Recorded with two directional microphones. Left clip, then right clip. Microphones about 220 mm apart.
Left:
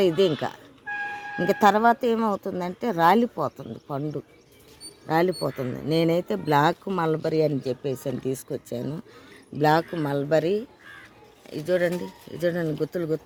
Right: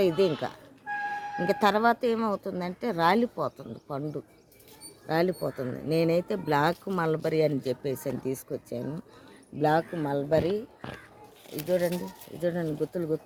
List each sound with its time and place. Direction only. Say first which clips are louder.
0.0 s speech: left 3 dB; 45° left (ahead or behind)
11.7 s speech: left 4 dB; 40° left (ahead or behind)